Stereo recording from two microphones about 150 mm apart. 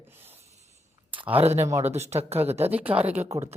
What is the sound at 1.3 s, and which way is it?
Speech, 45° right (ahead or behind).